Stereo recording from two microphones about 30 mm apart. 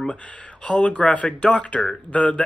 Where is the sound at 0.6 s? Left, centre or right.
Left.